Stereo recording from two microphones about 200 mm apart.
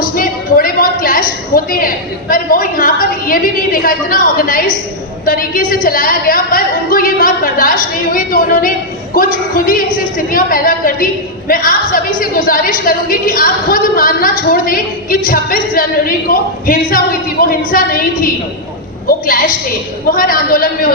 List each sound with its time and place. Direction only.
0.0 s a woman's voice: 45° left (ahead or behind)